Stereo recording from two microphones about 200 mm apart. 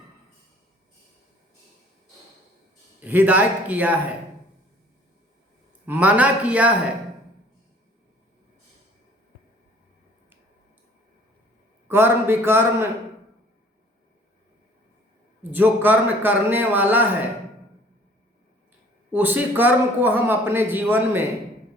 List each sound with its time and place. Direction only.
3.0 s a man's voice: 10° right (ahead or behind)
5.8 s a man's voice: 10° right (ahead or behind)
11.9 s a man's voice: 10° right (ahead or behind)
15.5 s a man's voice: 10° right (ahead or behind)
19.1 s a man's voice: 10° right (ahead or behind)